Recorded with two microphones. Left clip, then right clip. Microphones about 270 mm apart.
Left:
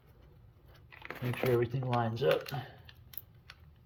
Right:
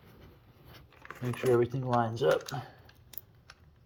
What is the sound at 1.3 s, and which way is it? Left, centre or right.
Speech, right.